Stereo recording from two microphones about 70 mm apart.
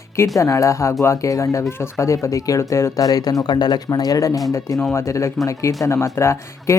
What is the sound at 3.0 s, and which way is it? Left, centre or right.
Speech, left.